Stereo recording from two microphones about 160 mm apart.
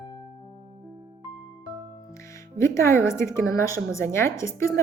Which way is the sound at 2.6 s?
15° left (ahead or behind).